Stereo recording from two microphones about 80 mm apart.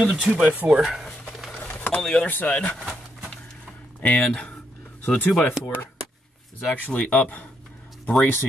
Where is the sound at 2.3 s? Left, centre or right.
Left.